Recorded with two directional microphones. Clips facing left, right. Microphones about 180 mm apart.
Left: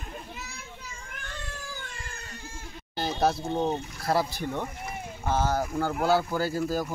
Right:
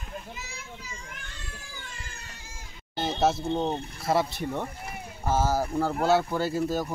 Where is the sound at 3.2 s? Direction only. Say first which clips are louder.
Right 1 dB; centre (ahead or behind).